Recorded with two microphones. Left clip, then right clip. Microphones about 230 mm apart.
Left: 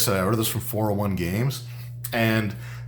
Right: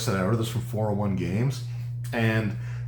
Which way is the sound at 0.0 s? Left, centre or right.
Left.